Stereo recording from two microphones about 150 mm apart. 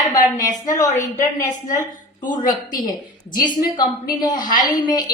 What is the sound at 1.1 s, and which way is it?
Speech, 60° left (ahead or behind).